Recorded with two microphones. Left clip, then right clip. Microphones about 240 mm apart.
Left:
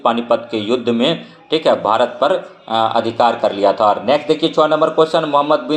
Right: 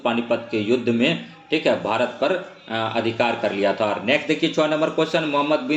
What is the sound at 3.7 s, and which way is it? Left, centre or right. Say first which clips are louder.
Speech: left 8 dB; centre.